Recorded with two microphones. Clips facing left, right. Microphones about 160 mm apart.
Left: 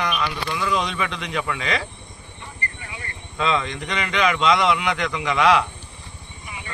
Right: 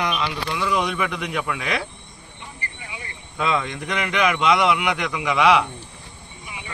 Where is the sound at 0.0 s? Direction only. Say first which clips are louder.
Even; 20° right (ahead or behind).